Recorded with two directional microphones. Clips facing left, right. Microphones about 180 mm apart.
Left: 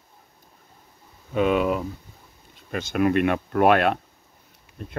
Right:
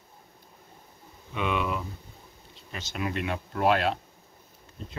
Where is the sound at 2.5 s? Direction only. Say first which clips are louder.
Left 11 dB; 55° left (ahead or behind).